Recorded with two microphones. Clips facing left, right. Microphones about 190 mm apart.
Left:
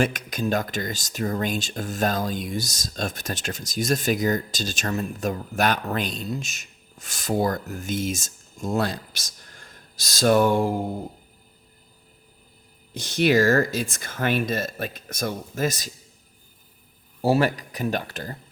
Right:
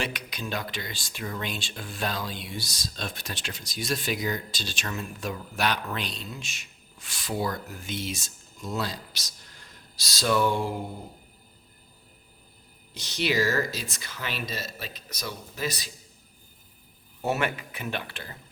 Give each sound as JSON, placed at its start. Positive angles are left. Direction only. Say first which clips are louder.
{"t": 0.0, "sound": "speech", "louder": "left 9 dB", "side_deg": 45}
{"t": 12.9, "sound": "speech", "louder": "left 8 dB", "side_deg": 50}
{"t": 17.2, "sound": "speech", "louder": "left 7 dB", "side_deg": 30}